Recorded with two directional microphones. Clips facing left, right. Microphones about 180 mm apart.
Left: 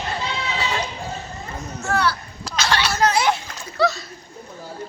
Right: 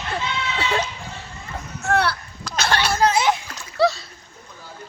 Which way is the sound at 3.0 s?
25° right (ahead or behind).